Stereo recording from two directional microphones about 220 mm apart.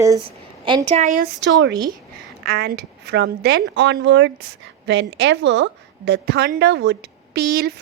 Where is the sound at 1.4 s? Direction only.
55° right (ahead or behind).